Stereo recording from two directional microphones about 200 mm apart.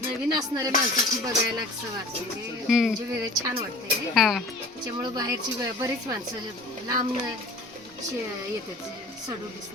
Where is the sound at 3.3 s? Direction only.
20° right (ahead or behind).